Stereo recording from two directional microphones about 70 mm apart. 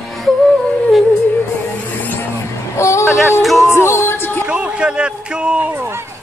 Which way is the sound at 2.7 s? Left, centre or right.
Left.